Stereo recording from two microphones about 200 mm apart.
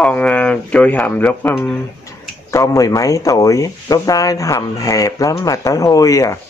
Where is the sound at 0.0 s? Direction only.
5° left (ahead or behind).